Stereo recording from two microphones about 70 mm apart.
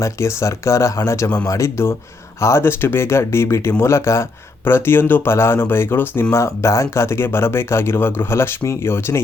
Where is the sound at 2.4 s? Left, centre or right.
Left.